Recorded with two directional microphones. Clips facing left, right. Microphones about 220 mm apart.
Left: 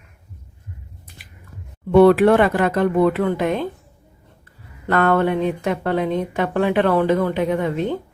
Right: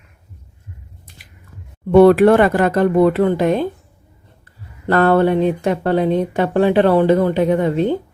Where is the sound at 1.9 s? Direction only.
45° right (ahead or behind).